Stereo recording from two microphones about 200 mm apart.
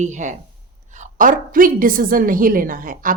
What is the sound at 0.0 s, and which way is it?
Speech, 35° right (ahead or behind).